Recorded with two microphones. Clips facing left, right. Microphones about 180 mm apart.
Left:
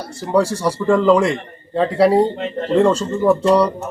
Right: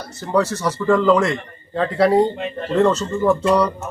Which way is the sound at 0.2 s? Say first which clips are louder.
Left 2 dB; 10° left (ahead or behind).